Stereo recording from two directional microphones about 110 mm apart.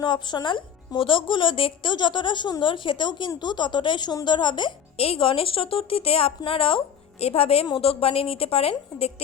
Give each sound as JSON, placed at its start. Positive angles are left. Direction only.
{"t": 0.0, "sound": "a woman's voice", "side_deg": 40}
{"t": 4.9, "sound": "a woman's voice", "side_deg": 60}